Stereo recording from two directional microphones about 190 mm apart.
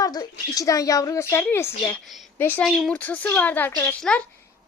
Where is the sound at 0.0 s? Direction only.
20° left (ahead or behind).